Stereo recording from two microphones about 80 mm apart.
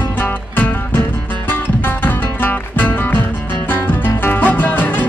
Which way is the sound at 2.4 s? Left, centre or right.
Left.